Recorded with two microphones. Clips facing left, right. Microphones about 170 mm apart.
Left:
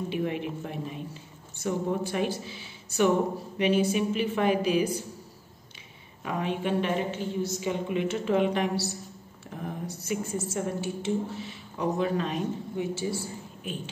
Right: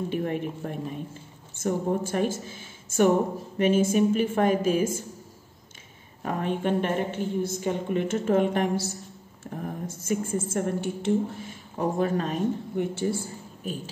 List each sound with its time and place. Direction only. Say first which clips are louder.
0.1 s a woman's voice: right 1 dB; 45° right (ahead or behind)
6.2 s a woman's voice: right 2 dB; 50° right (ahead or behind)